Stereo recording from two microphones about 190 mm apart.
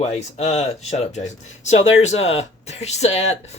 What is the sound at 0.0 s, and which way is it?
Speech, 35° left (ahead or behind).